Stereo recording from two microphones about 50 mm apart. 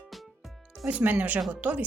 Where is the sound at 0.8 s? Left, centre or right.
Right.